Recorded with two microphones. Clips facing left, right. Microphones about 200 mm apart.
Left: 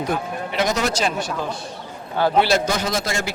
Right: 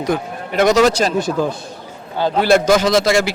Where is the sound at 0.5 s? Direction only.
70° right (ahead or behind).